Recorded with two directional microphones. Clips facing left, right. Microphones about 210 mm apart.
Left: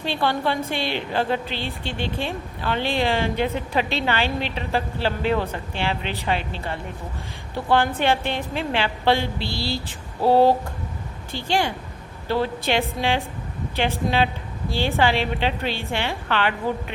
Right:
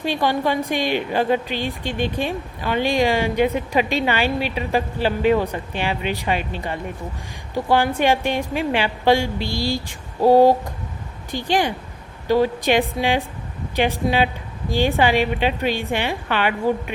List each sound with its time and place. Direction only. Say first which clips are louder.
0.0 s a woman's voice: right 3 dB; 15° right (ahead or behind)